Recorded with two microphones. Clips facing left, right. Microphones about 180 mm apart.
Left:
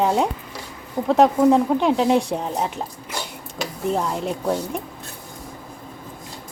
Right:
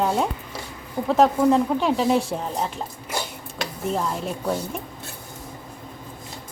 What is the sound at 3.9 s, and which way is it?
Speech, 20° left (ahead or behind).